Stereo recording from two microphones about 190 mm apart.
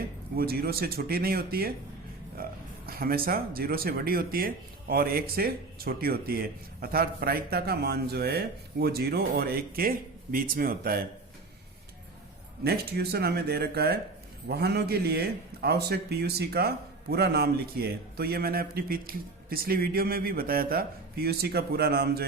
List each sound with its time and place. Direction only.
0.3 s a man's voice: 55° right (ahead or behind)
12.6 s a man's voice: 55° right (ahead or behind)